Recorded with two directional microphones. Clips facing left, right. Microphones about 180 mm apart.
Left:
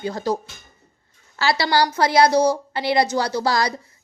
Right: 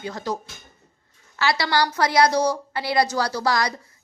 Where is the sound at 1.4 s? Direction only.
30° left (ahead or behind).